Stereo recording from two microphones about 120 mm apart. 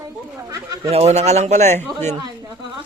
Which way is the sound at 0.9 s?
60° right (ahead or behind).